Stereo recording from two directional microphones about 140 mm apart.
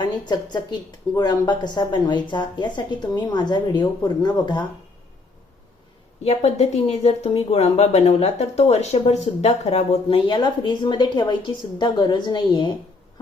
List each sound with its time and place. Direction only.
0.0 s a woman's voice: 30° left (ahead or behind)
6.2 s speech: 50° left (ahead or behind)
10.2 s a woman's voice: 35° left (ahead or behind)